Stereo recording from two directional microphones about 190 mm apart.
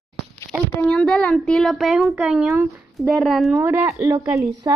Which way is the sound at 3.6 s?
10° right (ahead or behind).